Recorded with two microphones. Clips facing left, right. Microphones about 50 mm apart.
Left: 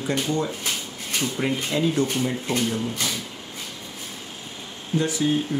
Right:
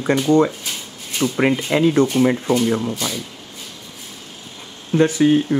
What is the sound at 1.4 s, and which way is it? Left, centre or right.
Speech, right.